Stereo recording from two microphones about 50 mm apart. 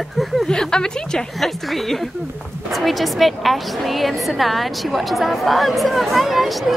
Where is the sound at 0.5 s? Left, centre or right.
Centre.